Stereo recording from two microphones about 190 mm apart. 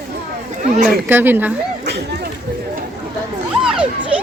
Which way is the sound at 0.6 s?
40° right (ahead or behind).